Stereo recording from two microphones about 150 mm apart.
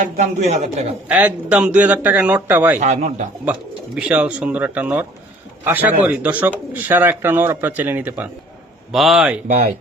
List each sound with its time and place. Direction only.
0.2 s speech: 50° right (ahead or behind)
1.0 s speech: 10° right (ahead or behind)
2.7 s speech: 50° right (ahead or behind)
3.9 s speech: 5° right (ahead or behind)
8.9 s speech: centre (ahead or behind)